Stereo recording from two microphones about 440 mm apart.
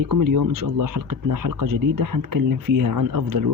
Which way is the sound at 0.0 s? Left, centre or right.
Right.